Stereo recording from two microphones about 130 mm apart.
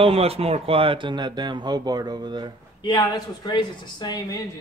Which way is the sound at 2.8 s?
35° left (ahead or behind).